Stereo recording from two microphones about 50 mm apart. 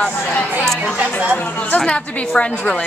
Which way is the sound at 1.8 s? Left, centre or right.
Centre.